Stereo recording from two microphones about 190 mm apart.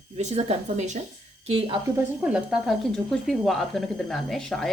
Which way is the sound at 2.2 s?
5° right (ahead or behind).